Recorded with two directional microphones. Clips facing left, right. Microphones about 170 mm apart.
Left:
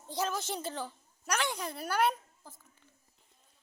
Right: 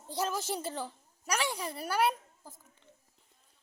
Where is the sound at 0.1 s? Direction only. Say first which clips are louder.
Right 1 dB; 5° right (ahead or behind).